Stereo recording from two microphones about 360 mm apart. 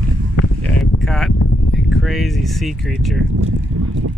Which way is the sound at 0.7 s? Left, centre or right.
Centre.